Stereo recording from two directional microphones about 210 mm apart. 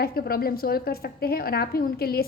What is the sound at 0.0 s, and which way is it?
A woman's voice, 45° left (ahead or behind).